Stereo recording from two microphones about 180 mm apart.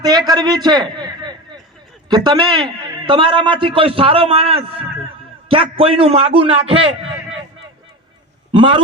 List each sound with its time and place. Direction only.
0.0 s a man's voice: 20° right (ahead or behind)
8.5 s a man's voice: 25° right (ahead or behind)